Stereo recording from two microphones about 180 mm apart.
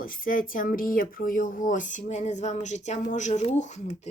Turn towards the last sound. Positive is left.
turn(degrees=40)  # may be behind; listen again after turning